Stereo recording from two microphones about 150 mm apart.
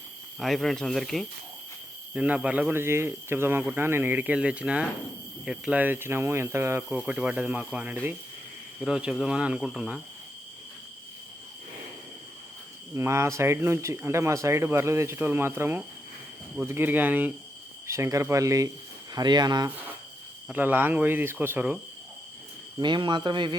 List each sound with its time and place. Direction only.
0.3 s speech: centre (ahead or behind); by 6.8 s 15° right (ahead or behind)
6.9 s speech: 5° right (ahead or behind)
12.9 s speech: 20° right (ahead or behind)
20.5 s speech: 10° right (ahead or behind)
22.8 s speech: 30° right (ahead or behind)